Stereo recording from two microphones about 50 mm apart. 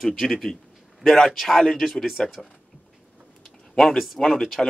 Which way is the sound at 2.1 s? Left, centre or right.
Centre.